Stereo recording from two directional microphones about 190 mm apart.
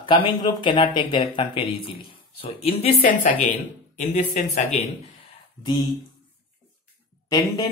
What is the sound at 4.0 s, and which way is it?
Speech, 40° left (ahead or behind).